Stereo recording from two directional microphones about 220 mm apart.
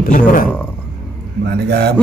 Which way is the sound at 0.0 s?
40° left (ahead or behind).